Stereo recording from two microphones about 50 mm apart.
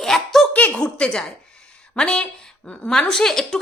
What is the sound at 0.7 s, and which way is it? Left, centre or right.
A woman's voice, centre.